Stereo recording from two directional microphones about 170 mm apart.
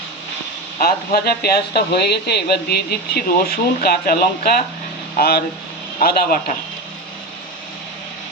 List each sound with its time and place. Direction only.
0.8 s speech: 65° left (ahead or behind)